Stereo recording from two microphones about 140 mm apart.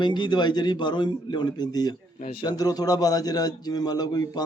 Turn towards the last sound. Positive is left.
turn(degrees=30)  # may be behind; listen again after turning